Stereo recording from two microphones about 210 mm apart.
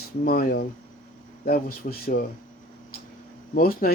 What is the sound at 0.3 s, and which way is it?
Speech, 45° left (ahead or behind).